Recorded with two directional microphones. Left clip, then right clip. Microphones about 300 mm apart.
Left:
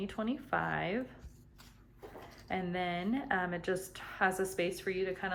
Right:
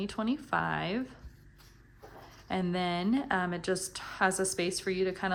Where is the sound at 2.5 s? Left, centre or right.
Centre.